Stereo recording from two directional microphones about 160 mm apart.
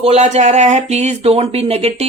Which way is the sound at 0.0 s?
40° right (ahead or behind).